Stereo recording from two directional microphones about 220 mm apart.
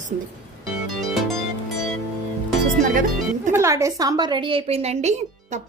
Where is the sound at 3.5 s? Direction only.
15° right (ahead or behind).